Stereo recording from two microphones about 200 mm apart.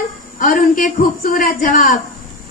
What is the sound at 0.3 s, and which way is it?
A man's voice, 45° left (ahead or behind).